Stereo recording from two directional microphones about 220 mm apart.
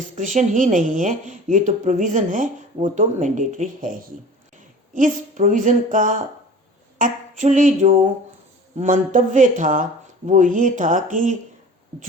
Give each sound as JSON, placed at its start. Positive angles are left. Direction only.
{"t": 0.3, "sound": "a woman's voice", "side_deg": -35}